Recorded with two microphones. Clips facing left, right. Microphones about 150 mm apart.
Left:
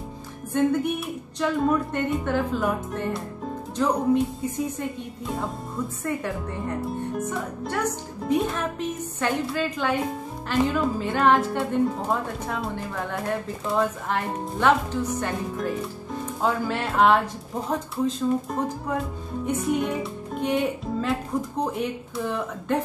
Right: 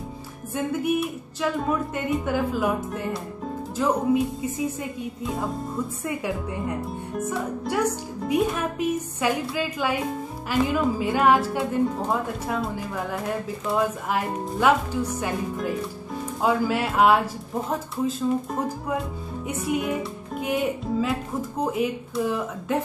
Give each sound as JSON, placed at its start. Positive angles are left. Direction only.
{"t": 0.5, "sound": "speech", "side_deg": -5}